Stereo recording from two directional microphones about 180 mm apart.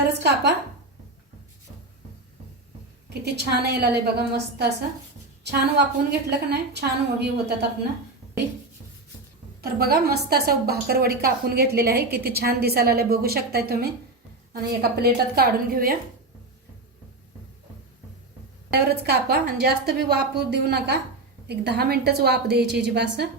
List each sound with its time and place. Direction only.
0.2 s a woman's voice: 70° right (ahead or behind)
3.1 s a woman's voice: 65° right (ahead or behind)
9.6 s a woman's voice: 60° right (ahead or behind)
18.7 s a woman's voice: 60° right (ahead or behind)